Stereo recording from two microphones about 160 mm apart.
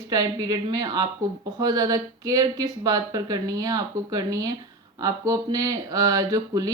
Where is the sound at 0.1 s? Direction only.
25° right (ahead or behind).